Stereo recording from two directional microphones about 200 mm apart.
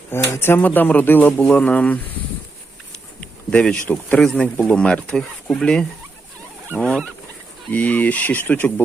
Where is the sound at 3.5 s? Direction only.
5° left (ahead or behind).